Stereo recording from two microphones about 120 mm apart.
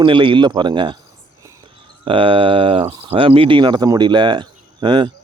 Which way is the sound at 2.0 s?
45° right (ahead or behind).